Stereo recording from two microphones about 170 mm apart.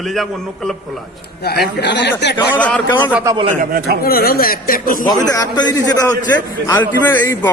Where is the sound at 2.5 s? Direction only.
10° left (ahead or behind).